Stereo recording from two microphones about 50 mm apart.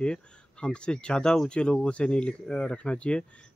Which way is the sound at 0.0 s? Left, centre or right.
Centre.